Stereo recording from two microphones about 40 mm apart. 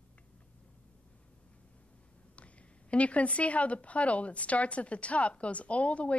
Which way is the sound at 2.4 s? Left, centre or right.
Left.